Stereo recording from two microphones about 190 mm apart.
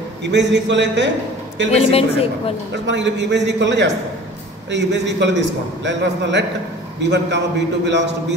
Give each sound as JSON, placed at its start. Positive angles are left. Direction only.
{"t": 0.2, "sound": "a man's voice", "side_deg": -65}
{"t": 1.7, "sound": "a woman's voice", "side_deg": 30}
{"t": 2.9, "sound": "a man's voice", "side_deg": -70}